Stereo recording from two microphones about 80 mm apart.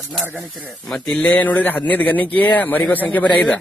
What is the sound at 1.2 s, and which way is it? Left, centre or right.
A man's voice, centre.